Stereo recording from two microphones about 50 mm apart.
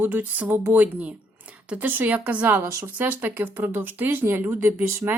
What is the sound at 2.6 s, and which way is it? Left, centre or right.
Speech, right.